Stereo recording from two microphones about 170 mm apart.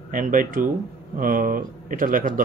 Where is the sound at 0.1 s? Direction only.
55° right (ahead or behind).